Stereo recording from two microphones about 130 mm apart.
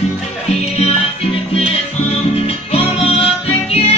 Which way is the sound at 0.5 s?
50° left (ahead or behind).